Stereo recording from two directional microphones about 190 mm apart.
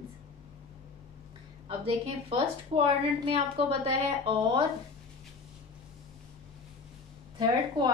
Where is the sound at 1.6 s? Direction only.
30° right (ahead or behind).